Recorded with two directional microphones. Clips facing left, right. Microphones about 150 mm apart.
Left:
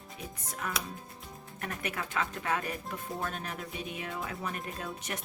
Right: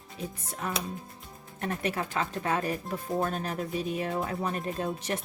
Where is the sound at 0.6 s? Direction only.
30° right (ahead or behind).